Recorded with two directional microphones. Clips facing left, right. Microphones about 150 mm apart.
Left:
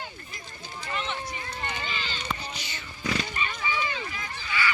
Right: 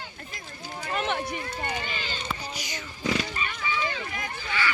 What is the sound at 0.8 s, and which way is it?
Run, 45° right (ahead or behind).